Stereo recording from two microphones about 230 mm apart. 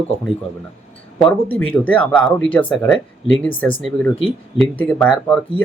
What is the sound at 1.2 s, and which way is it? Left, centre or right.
Speech, centre.